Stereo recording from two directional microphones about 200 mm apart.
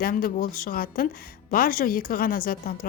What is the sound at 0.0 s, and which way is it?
A woman's voice, 45° left (ahead or behind).